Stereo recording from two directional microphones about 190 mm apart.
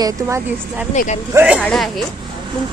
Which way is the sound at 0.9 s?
40° left (ahead or behind).